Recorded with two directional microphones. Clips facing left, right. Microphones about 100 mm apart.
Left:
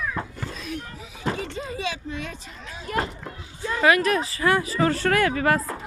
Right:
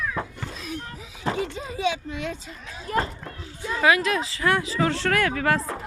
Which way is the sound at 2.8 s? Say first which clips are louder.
Right 1 dB; 35° right (ahead or behind).